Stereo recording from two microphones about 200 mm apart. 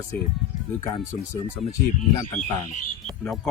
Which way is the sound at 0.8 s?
20° left (ahead or behind).